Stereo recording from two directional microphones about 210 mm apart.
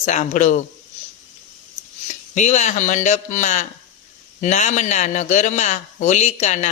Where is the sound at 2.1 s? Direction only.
35° left (ahead or behind).